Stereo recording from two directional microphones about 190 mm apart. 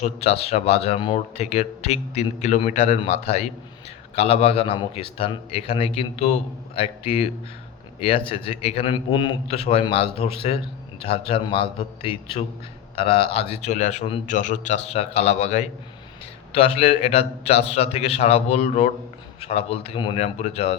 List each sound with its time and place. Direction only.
0.0 s a man's voice: 30° left (ahead or behind)
8.3 s a man's voice: 30° left (ahead or behind)